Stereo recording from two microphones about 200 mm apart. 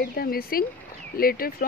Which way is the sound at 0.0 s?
50° left (ahead or behind).